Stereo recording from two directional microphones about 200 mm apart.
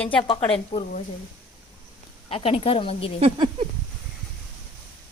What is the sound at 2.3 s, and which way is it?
Speech, 30° left (ahead or behind).